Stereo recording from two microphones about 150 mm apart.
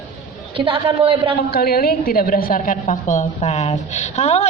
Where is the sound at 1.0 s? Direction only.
35° right (ahead or behind).